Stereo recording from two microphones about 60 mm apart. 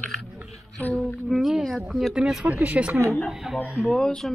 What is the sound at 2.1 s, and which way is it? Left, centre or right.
Speech, centre.